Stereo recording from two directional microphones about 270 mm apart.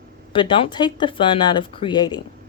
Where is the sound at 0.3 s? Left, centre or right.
Centre.